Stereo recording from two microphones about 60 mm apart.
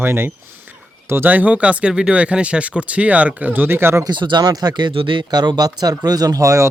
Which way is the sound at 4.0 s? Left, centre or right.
Right.